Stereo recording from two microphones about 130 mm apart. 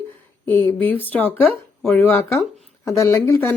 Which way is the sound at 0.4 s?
15° left (ahead or behind).